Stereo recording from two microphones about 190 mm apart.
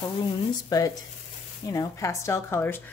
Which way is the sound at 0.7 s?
20° left (ahead or behind).